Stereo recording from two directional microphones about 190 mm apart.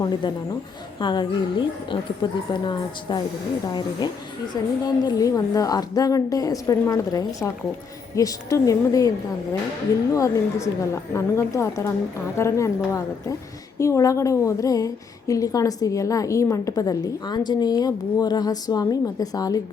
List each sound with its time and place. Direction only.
0.0 s a woman's voice: 25° left (ahead or behind)
10.2 s a woman's voice: 15° left (ahead or behind)